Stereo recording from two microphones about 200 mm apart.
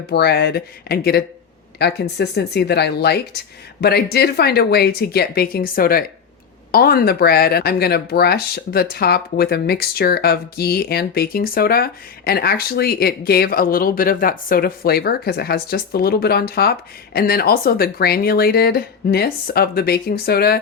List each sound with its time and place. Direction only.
0.1 s speech: 55° left (ahead or behind)